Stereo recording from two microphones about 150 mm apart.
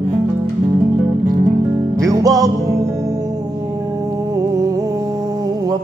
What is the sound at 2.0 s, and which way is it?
Music, 25° right (ahead or behind).